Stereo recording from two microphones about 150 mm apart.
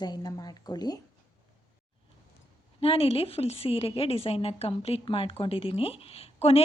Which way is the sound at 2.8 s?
40° left (ahead or behind).